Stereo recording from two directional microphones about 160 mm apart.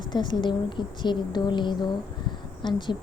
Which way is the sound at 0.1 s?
30° left (ahead or behind).